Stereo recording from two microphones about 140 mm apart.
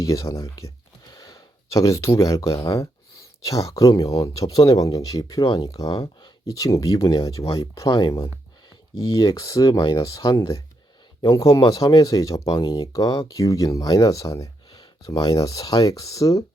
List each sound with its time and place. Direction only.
0.0 s speech: 25° left (ahead or behind)